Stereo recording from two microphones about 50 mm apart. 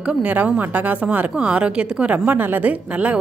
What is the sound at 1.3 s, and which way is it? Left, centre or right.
A woman's voice, right.